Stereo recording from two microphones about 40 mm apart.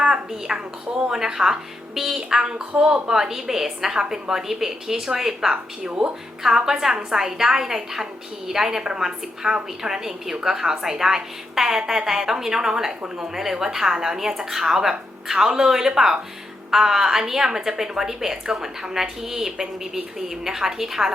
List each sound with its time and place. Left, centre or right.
0.0 s a sound: centre
0.5 s a woman's voice: right
5.9 s speech: right
6.4 s a woman's voice: centre